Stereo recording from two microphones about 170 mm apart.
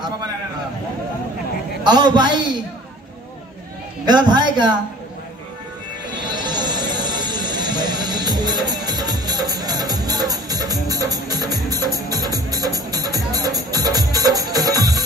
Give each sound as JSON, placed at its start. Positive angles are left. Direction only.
{"t": 1.9, "sound": "a man's voice", "side_deg": -25}
{"t": 4.0, "sound": "a man's voice", "side_deg": -25}
{"t": 6.0, "sound": "music", "side_deg": -25}